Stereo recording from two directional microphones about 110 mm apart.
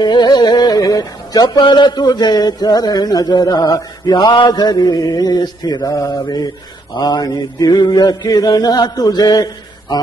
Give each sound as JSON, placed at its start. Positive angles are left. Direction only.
{"t": 0.0, "sound": "music", "side_deg": 40}